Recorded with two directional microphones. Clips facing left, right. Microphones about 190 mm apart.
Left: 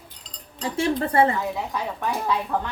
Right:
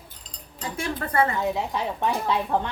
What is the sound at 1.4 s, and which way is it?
Speech, 25° right (ahead or behind).